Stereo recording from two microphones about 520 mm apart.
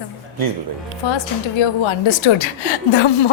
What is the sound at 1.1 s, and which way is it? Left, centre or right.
A woman's voice, left.